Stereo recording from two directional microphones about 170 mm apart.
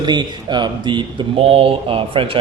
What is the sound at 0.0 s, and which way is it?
Speech, 25° right (ahead or behind).